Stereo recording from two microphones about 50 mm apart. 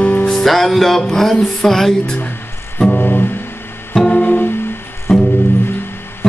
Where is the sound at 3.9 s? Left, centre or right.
Centre.